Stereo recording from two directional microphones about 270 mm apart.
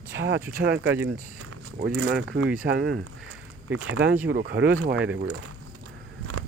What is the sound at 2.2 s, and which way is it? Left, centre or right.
Speech, right.